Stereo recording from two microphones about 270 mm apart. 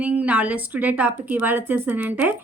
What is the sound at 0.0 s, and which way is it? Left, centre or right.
A woman's voice, centre.